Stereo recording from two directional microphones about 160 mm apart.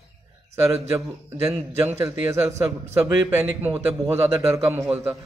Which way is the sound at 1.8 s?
15° right (ahead or behind).